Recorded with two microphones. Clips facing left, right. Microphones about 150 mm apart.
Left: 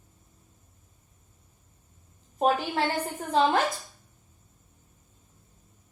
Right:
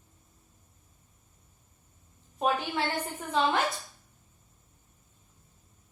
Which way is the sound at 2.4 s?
40° left (ahead or behind).